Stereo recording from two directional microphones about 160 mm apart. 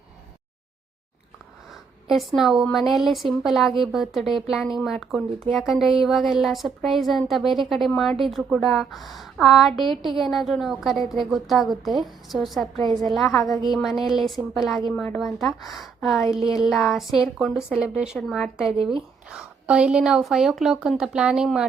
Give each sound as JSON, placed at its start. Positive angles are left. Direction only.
{"t": 2.0, "sound": "speech", "side_deg": 0}
{"t": 18.8, "sound": "speech", "side_deg": -30}
{"t": 19.3, "sound": "speech", "side_deg": -5}